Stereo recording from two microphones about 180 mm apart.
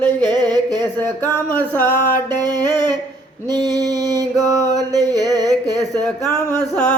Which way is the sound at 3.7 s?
20° right (ahead or behind).